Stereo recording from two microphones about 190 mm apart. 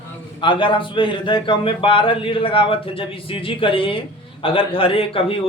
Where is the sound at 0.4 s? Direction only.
25° left (ahead or behind).